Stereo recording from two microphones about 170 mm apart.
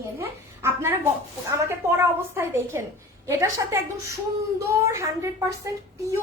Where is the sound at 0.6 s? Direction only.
15° right (ahead or behind).